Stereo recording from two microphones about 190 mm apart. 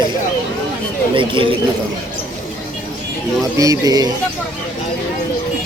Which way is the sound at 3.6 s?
20° right (ahead or behind).